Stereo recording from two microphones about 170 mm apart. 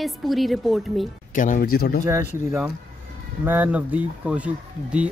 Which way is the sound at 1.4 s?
55° left (ahead or behind).